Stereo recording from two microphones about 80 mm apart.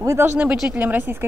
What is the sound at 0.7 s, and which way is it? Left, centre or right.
Speech, right.